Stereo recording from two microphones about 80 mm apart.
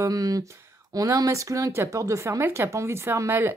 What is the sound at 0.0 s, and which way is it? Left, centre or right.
A woman's voice, right.